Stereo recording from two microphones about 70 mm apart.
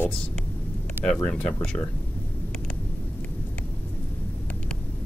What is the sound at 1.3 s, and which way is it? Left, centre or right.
Speech, centre.